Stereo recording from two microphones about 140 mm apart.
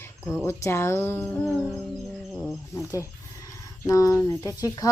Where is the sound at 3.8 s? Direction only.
25° left (ahead or behind).